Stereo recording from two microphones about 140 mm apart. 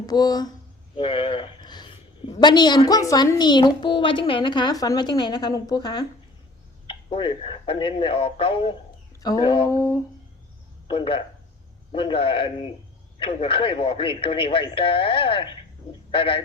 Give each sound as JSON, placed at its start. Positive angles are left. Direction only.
{"t": 0.0, "sound": "a woman's voice", "side_deg": 30}
{"t": 9.6, "sound": "speech", "side_deg": 25}
{"t": 10.8, "sound": "a man's voice", "side_deg": 40}